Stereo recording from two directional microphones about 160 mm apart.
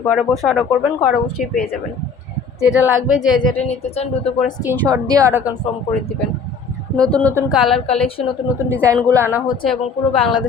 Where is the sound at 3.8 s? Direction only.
40° left (ahead or behind).